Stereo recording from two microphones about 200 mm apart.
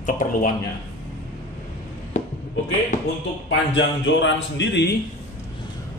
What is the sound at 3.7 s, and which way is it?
Speech, 65° left (ahead or behind).